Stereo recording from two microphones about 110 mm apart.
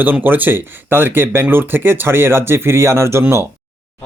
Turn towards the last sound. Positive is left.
turn(degrees=-25)  # may be behind; listen again after turning